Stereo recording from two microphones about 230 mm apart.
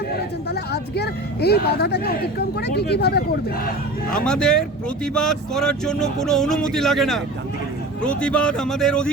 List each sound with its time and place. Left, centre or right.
0.7 s speech: left
4.3 s speech: centre